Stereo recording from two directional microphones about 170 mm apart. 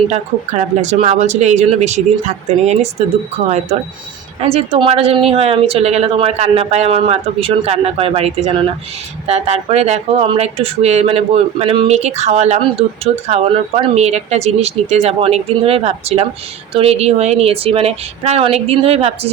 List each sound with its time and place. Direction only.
0.1 s speech: 40° right (ahead or behind)
4.4 s speech: 35° right (ahead or behind)